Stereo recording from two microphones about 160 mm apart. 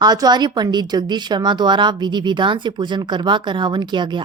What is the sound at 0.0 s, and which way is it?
A woman's voice, 25° right (ahead or behind).